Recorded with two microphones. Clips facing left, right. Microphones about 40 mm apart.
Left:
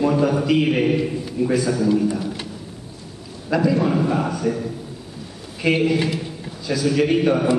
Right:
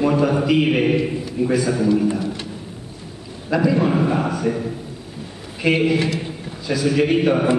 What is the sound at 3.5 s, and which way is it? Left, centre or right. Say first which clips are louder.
A man's voice: right 1 dB; centre.